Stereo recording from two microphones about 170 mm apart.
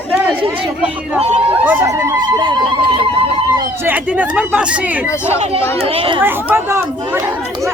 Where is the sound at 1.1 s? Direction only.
40° right (ahead or behind).